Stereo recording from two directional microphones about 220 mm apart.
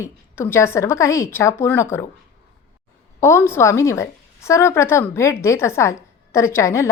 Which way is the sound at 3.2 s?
10° left (ahead or behind).